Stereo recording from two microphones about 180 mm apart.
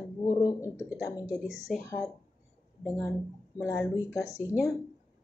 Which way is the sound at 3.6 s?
20° left (ahead or behind).